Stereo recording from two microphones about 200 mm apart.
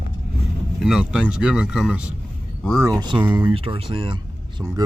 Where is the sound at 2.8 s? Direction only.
20° right (ahead or behind).